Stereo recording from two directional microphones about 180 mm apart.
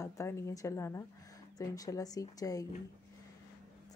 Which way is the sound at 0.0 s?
15° left (ahead or behind).